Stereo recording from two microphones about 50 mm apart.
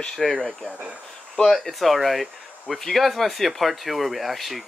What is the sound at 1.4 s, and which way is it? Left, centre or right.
Speech, centre.